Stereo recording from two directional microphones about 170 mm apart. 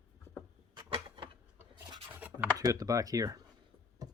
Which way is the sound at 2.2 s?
10° right (ahead or behind).